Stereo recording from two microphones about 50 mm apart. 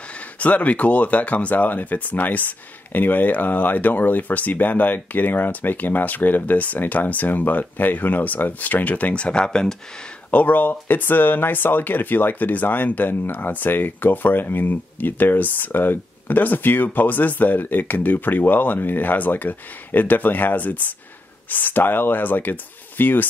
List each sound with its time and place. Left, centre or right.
0.4 s speech: left
10.3 s speech: left